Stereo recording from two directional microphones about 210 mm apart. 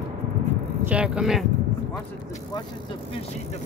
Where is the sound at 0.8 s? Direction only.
5° right (ahead or behind).